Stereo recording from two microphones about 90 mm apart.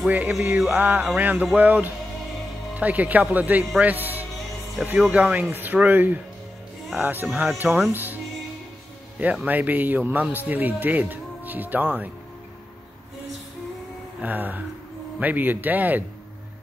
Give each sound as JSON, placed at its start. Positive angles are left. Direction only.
{"t": 0.1, "sound": "speech", "side_deg": -20}
{"t": 9.2, "sound": "speech", "side_deg": -15}
{"t": 14.2, "sound": "speech", "side_deg": -20}